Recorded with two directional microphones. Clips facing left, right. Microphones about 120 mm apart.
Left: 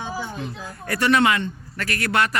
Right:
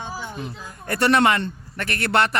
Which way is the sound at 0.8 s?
30° right (ahead or behind).